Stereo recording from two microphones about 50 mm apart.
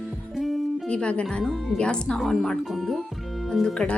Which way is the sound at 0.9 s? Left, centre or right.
Left.